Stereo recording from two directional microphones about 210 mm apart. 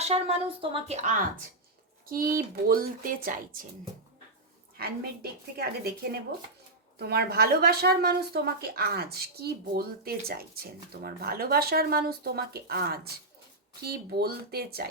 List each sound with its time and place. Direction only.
0.0 s a woman's voice: 30° right (ahead or behind)
4.8 s speech: 50° right (ahead or behind)
7.0 s speech: 50° right (ahead or behind)
14.2 s speech: 45° right (ahead or behind)